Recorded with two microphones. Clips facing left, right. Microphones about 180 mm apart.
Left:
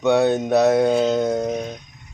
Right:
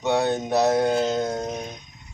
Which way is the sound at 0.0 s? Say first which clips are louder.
Left 5 dB; 60° left (ahead or behind).